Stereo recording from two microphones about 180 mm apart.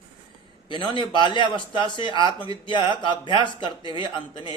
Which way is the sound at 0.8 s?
25° left (ahead or behind).